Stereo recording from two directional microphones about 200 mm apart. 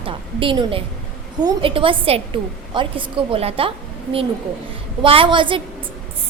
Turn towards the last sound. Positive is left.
turn(degrees=-25)  # may be behind; listen again after turning